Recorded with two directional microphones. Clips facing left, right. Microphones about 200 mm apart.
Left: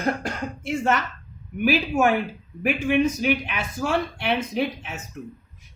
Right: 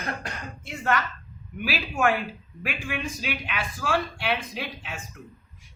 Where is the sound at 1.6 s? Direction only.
20° left (ahead or behind).